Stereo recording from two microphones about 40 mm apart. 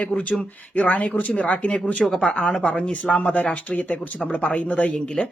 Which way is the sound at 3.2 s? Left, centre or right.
Left.